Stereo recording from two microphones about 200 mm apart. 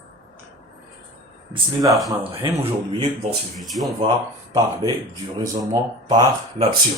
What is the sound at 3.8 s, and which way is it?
Speech, 35° right (ahead or behind).